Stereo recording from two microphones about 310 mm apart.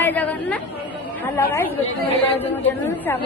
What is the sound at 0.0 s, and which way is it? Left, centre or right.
Chatter, centre.